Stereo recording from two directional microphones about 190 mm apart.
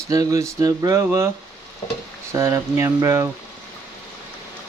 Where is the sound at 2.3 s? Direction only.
15° right (ahead or behind).